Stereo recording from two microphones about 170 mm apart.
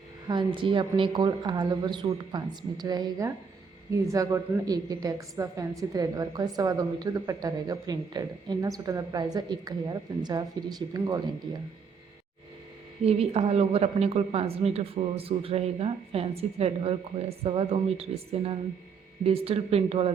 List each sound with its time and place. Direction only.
0.3 s a woman's voice: 30° right (ahead or behind)
13.1 s speech: 40° right (ahead or behind)